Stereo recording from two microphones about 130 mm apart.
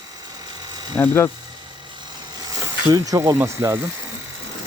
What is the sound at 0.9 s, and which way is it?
Speech, 20° left (ahead or behind).